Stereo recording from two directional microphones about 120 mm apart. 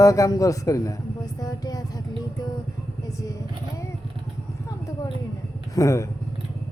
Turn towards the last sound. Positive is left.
turn(degrees=25)  # may be behind; listen again after turning